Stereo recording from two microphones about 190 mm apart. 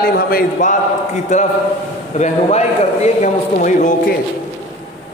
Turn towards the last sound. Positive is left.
turn(degrees=45)  # may be behind; listen again after turning